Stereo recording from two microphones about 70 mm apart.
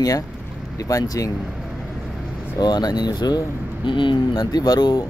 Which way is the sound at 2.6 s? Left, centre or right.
Left.